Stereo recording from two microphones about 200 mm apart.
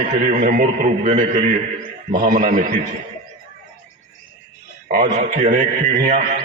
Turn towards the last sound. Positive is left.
turn(degrees=-40)  # may be behind; listen again after turning